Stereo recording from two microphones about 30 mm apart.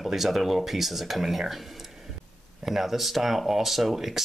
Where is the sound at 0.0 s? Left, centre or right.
Centre.